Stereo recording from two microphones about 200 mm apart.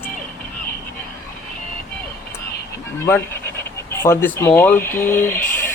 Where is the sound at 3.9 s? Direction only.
10° left (ahead or behind).